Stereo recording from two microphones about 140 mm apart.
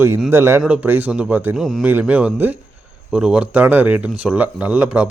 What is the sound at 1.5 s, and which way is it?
Speech, centre (ahead or behind).